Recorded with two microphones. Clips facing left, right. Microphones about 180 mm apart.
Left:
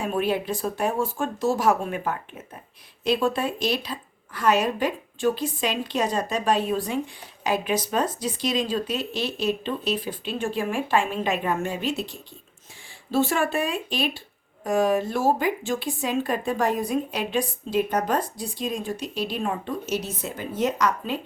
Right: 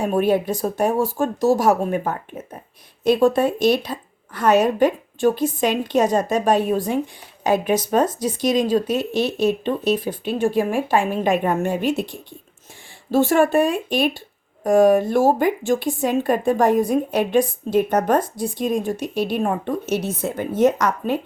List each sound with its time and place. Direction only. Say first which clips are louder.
0.0 s speech: right 6 dB; 45° right (ahead or behind)